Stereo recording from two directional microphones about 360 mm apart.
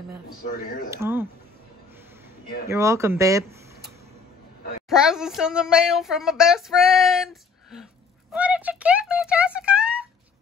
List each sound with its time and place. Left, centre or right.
0.5 s speech: left
0.8 s speech: centre
2.7 s speech: centre
8.3 s speech: centre